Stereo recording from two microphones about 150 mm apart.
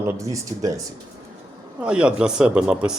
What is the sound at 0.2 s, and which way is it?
Speech, 20° right (ahead or behind).